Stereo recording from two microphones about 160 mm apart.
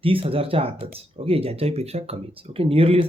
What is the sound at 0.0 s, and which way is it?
Speech, 35° right (ahead or behind).